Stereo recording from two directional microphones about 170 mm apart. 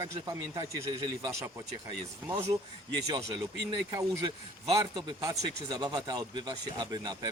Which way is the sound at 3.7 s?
20° right (ahead or behind).